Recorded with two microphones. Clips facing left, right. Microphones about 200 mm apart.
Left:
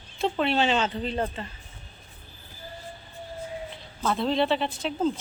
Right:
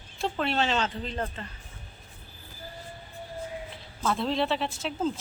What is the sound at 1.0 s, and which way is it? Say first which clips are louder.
Speech: left 5 dB; 20° left (ahead or behind).